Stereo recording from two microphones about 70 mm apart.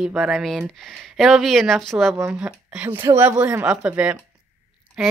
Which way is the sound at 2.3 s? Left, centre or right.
Centre.